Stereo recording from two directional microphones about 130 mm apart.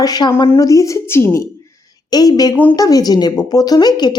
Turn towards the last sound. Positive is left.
turn(degrees=30)  # may be behind; listen again after turning